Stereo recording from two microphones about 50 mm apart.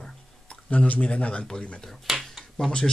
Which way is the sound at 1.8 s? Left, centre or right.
Centre.